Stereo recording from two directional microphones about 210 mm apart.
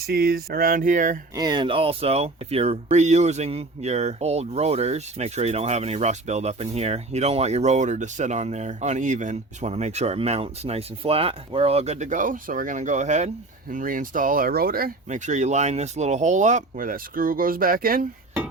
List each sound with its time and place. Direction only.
0.0 s speech: 45° right (ahead or behind)
1.4 s speech: 20° right (ahead or behind); by 18.0 s 45° right (ahead or behind)